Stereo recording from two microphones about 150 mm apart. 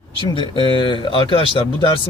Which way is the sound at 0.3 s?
35° left (ahead or behind).